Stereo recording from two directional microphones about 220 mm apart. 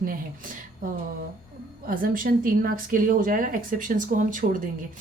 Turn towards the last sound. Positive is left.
turn(degrees=-35)  # may be behind; listen again after turning